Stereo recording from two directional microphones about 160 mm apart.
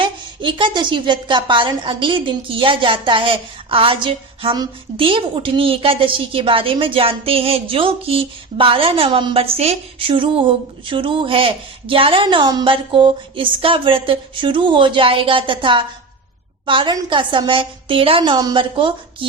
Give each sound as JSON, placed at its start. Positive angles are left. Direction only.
{"t": 0.0, "sound": "a woman's voice", "side_deg": -30}